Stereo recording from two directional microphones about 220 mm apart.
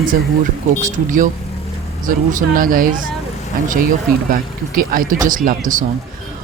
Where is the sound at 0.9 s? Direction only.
35° right (ahead or behind).